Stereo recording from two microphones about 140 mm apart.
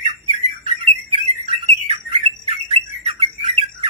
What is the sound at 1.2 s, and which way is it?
Bird, 45° right (ahead or behind).